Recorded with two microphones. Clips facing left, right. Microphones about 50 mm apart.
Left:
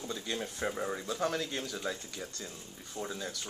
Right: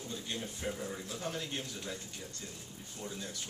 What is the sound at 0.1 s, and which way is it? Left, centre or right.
Speech, left.